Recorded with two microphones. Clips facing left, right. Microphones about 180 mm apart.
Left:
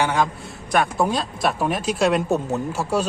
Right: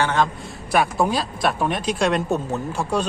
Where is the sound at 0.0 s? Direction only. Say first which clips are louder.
Even; 10° left (ahead or behind).